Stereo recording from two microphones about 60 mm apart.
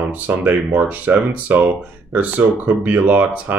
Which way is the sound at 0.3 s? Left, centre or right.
Right.